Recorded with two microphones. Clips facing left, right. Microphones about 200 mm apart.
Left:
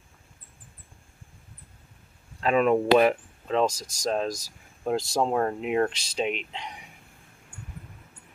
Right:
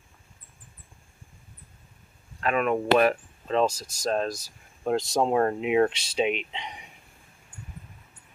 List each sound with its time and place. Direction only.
2.4 s speech: 30° left (ahead or behind)
2.9 s speech: 15° left (ahead or behind)
3.6 s speech: 5° right (ahead or behind)
4.0 s speech: 10° left (ahead or behind)
4.8 s speech: centre (ahead or behind)